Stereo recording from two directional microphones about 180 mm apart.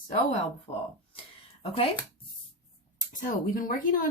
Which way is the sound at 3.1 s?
50° left (ahead or behind).